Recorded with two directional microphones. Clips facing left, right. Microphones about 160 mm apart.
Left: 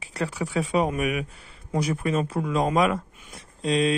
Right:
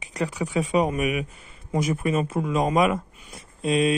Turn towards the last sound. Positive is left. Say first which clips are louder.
# right 1 dB
turn(degrees=-20)  # may be behind; listen again after turning